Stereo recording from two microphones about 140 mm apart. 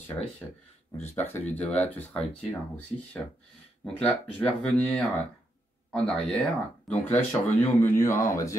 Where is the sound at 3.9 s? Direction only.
5° left (ahead or behind).